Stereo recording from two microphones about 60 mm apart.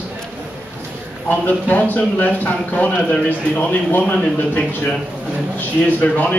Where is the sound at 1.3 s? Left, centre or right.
Left.